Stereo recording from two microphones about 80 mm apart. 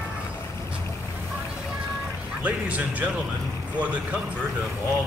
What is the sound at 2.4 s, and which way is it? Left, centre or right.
Speech, centre.